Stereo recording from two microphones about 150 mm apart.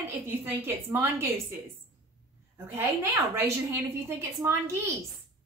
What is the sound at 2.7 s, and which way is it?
A woman's voice, 15° right (ahead or behind).